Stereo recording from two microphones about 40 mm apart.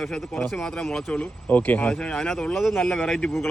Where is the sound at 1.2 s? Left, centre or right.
Left.